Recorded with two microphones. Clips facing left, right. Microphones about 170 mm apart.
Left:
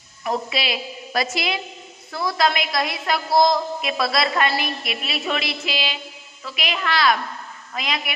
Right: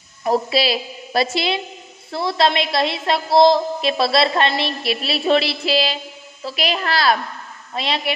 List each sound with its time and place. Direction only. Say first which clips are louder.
0.2 s a woman's voice: right 6 dB; 35° right (ahead or behind)